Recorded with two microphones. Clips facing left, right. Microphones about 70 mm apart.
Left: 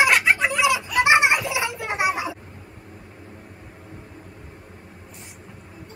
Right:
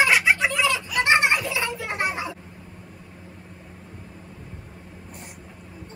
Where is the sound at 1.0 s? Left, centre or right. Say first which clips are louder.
Left 2 dB; centre.